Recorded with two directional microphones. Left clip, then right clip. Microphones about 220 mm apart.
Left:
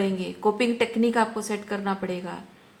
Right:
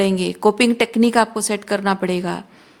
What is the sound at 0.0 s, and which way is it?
A woman's voice, 55° right (ahead or behind).